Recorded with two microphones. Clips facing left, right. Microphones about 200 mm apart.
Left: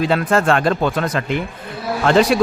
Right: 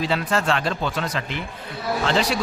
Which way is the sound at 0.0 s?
55° left (ahead or behind).